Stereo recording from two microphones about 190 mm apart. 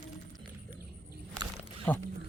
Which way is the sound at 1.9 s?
10° left (ahead or behind).